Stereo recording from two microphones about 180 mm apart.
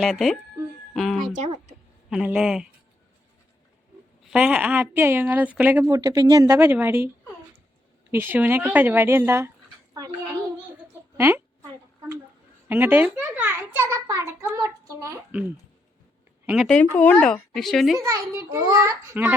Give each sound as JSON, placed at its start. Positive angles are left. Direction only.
{"t": 0.0, "sound": "speech", "side_deg": 0}
{"t": 4.3, "sound": "a child's voice", "side_deg": -5}
{"t": 8.1, "sound": "a child's voice", "side_deg": -10}
{"t": 9.9, "sound": "a sound", "side_deg": -20}
{"t": 11.2, "sound": "a woman's voice", "side_deg": -10}
{"t": 12.6, "sound": "a child's voice", "side_deg": -10}
{"t": 16.5, "sound": "speech", "side_deg": 0}
{"t": 17.9, "sound": "a child's voice", "side_deg": -15}